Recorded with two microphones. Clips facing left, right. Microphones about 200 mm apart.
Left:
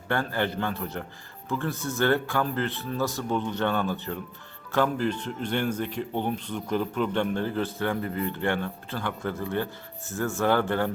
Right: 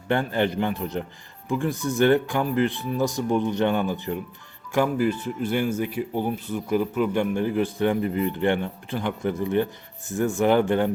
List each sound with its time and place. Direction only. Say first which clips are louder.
0.1 s speech: right 4 dB; 20° right (ahead or behind)